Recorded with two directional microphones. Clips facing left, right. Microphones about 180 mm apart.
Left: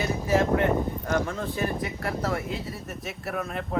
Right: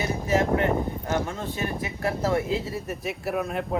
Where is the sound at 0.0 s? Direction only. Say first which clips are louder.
Even; 20° right (ahead or behind).